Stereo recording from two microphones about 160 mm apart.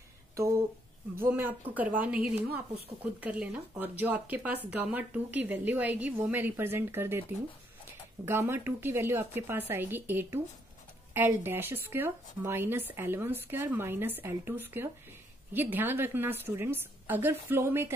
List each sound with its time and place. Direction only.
0.4 s speech: 20° right (ahead or behind)